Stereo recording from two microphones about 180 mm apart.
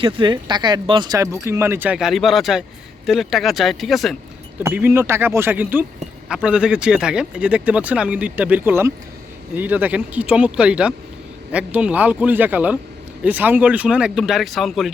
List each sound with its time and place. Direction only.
0.0 s speech: 25° right (ahead or behind); by 4.2 s centre (ahead or behind)
4.6 s speech: 10° right (ahead or behind)